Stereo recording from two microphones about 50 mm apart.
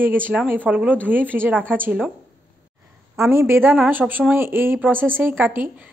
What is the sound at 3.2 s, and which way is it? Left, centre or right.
Speech, right.